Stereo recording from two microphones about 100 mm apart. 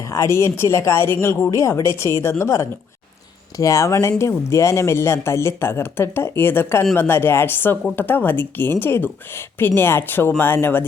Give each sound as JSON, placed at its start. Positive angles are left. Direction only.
{"t": 0.0, "sound": "a woman's voice", "side_deg": 30}